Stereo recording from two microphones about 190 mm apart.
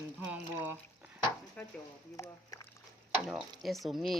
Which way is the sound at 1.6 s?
5° left (ahead or behind).